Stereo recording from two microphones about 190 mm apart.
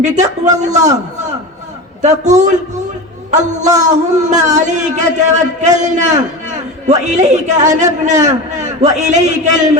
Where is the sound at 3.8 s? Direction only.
40° right (ahead or behind).